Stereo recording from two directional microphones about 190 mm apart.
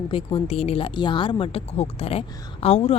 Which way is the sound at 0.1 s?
30° left (ahead or behind).